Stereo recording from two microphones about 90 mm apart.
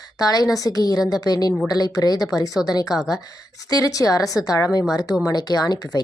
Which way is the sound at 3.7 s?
40° left (ahead or behind).